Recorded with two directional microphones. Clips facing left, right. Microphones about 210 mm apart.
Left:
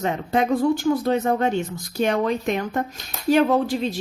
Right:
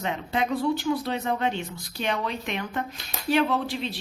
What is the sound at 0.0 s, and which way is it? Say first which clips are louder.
Speech: left 6 dB; 45° left (ahead or behind).